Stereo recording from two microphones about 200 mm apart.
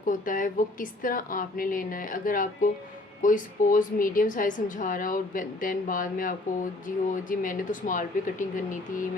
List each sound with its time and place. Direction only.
0.0 s a woman's voice: 40° left (ahead or behind)